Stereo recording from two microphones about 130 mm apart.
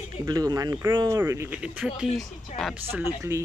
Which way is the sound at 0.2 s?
30° right (ahead or behind).